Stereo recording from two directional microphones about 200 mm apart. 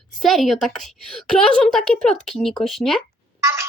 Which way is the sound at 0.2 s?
Centre (ahead or behind).